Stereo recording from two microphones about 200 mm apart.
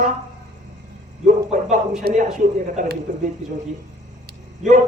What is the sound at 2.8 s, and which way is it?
Speech, 40° right (ahead or behind).